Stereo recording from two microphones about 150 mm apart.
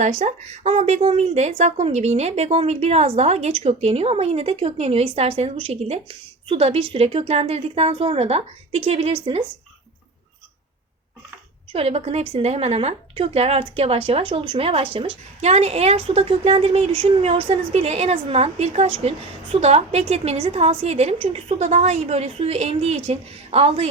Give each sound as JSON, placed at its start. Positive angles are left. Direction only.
{"t": 0.2, "sound": "a woman's voice", "side_deg": -50}
{"t": 11.7, "sound": "a woman's voice", "side_deg": -40}